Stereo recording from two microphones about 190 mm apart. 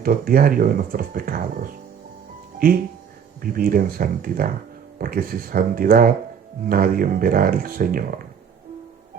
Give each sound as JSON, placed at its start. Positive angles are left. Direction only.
{"t": 0.0, "sound": "speech", "side_deg": -50}